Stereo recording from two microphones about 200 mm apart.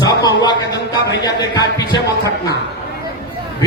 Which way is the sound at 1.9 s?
15° left (ahead or behind).